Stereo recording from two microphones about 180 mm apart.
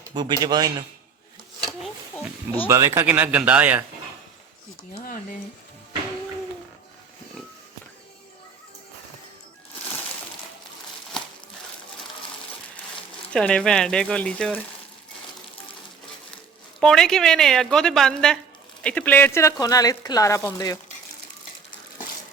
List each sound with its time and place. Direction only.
0.1 s speech: 25° right (ahead or behind)
2.6 s speech: 15° right (ahead or behind)
13.3 s a woman's voice: 5° left (ahead or behind)
16.8 s a woman's voice: 5° left (ahead or behind)